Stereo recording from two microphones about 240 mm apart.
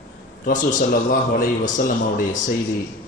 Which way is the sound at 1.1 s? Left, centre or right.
Left.